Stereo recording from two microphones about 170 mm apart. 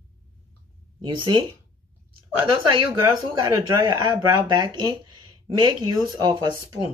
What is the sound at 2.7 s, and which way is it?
Speech, 25° right (ahead or behind).